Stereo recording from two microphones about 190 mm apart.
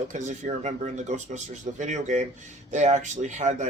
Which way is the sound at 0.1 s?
40° right (ahead or behind).